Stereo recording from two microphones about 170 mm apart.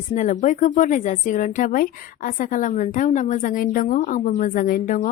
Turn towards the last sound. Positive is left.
turn(degrees=55)  # may be behind; listen again after turning